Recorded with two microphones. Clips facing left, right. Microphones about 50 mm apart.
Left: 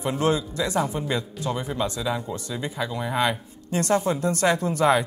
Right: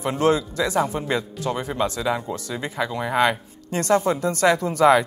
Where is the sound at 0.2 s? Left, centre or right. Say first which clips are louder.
Right 5 dB; right.